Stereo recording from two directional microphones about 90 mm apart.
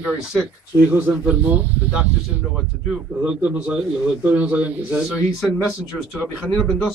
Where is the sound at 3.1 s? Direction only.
20° right (ahead or behind).